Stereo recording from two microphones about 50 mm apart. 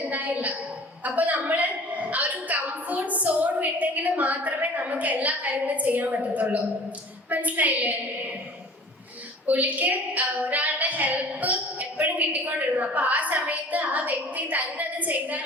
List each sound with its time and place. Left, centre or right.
0.1 s a woman's voice: right
9.5 s a woman's voice: right